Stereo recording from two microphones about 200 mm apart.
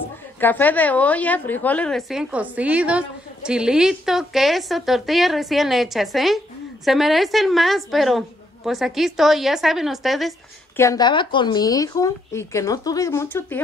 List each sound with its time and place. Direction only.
0.4 s a woman's voice: 10° left (ahead or behind)
10.8 s speech: 20° left (ahead or behind)